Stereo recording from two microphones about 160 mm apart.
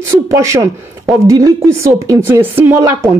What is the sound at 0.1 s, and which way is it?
Speech, 20° right (ahead or behind).